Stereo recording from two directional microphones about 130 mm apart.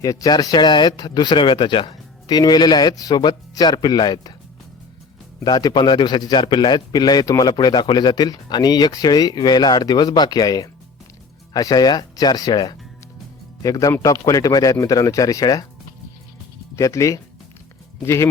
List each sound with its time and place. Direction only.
0.0 s a man's voice: 25° left (ahead or behind)
5.4 s a man's voice: 30° left (ahead or behind)
16.7 s speech: 25° left (ahead or behind)